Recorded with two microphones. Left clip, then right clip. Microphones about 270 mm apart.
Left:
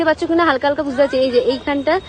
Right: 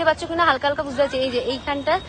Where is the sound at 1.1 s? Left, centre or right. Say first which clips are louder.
Left 7 dB; centre.